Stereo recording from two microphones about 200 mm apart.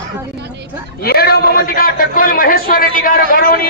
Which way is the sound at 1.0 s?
50° left (ahead or behind).